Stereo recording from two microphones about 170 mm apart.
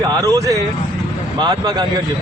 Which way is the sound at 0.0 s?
20° right (ahead or behind).